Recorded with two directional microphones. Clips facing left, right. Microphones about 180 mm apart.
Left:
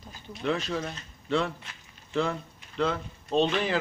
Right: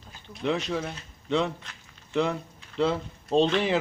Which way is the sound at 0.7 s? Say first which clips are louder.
Right 2 dB; 10° right (ahead or behind).